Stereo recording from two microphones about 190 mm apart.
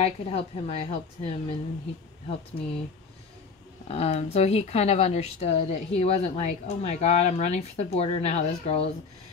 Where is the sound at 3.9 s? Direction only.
35° left (ahead or behind).